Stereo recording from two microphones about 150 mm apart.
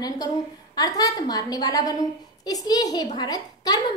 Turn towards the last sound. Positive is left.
turn(degrees=25)  # may be behind; listen again after turning